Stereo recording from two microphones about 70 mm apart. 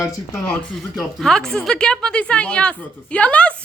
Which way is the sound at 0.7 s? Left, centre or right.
Centre.